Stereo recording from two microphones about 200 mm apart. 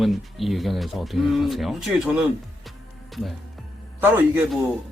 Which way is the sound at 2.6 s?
Centre (ahead or behind).